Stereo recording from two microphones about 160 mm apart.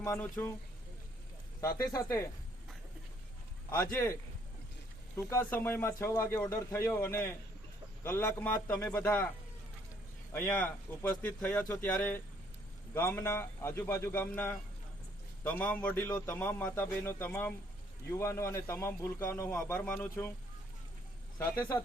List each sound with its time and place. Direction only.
0.0 s speech: 15° left (ahead or behind)
1.6 s speech: 25° left (ahead or behind)
3.9 s speech: 15° left (ahead or behind)
10.3 s speech: 10° left (ahead or behind)
21.3 s speech: 15° left (ahead or behind)